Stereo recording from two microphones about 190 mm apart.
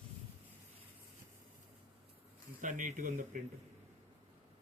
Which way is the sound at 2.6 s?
45° right (ahead or behind).